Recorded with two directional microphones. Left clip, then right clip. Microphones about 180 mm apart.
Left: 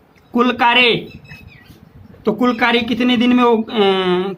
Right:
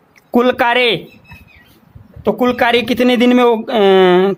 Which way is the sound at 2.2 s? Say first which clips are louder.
Right 2 dB; 45° right (ahead or behind).